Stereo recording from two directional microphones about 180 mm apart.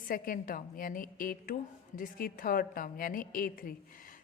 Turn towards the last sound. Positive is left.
turn(degrees=50)  # may be behind; listen again after turning